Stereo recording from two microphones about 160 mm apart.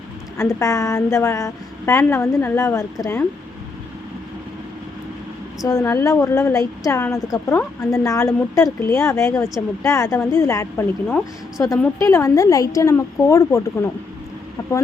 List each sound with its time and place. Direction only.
0.3 s a woman's voice: 20° left (ahead or behind)
5.6 s a woman's voice: 20° left (ahead or behind)